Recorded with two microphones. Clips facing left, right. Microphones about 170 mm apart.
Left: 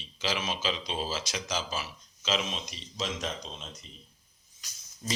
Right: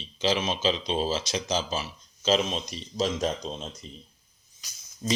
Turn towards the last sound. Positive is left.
turn(degrees=-25)  # may be behind; listen again after turning